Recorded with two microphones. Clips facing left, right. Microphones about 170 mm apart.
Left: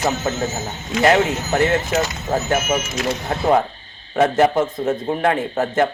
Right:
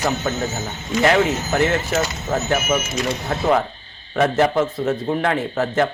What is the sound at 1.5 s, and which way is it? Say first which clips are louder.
Speech: left 4 dB; 30° left (ahead or behind).